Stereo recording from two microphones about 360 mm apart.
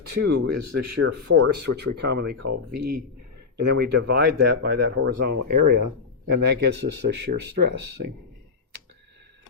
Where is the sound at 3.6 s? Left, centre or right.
Right.